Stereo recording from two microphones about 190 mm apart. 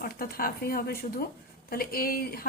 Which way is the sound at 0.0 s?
50° left (ahead or behind).